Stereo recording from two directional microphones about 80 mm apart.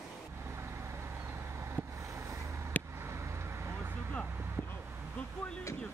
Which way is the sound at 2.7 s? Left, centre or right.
Left.